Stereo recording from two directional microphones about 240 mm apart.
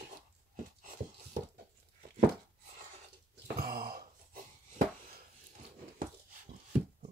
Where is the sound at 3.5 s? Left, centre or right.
Right.